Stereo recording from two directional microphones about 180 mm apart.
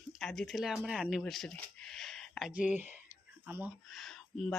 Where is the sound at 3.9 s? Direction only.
Centre (ahead or behind).